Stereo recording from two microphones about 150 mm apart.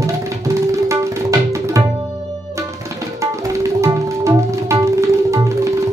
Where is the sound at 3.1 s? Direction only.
20° right (ahead or behind).